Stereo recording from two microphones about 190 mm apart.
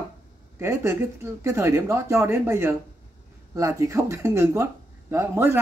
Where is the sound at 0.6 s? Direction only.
15° right (ahead or behind).